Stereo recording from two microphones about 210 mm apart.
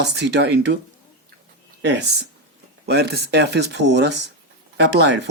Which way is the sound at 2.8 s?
50° right (ahead or behind).